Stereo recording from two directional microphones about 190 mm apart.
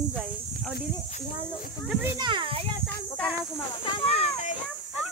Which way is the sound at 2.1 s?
25° right (ahead or behind).